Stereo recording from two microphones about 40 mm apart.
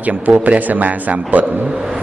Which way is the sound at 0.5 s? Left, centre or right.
Right.